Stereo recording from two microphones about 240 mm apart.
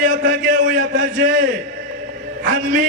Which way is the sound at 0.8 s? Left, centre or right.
Right.